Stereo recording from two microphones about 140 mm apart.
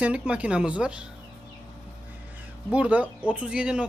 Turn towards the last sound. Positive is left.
turn(degrees=-5)  # may be behind; listen again after turning